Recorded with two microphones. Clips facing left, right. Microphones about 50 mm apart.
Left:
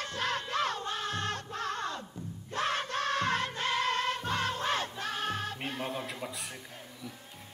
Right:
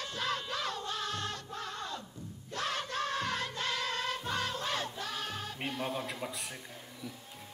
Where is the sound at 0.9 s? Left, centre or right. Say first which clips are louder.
Left 3 dB; left.